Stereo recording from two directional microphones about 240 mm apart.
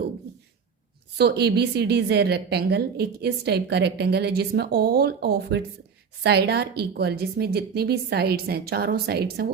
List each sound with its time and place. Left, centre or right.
1.2 s a woman's voice: right